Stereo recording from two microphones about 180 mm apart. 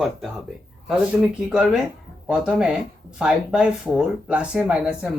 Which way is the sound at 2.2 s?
5° right (ahead or behind).